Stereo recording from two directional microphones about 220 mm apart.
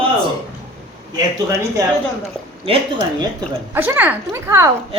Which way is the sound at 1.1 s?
15° right (ahead or behind).